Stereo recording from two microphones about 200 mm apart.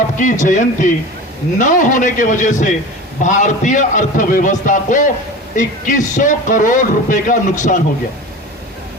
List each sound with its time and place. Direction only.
0.2 s speech: 40° left (ahead or behind)